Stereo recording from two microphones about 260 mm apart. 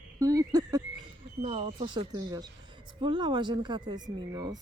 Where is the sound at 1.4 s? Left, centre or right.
Right.